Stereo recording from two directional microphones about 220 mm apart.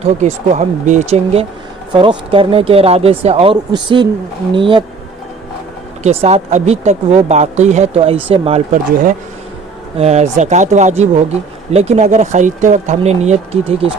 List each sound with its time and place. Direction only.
0.0 s speech: 30° right (ahead or behind)
6.0 s speech: 30° right (ahead or behind)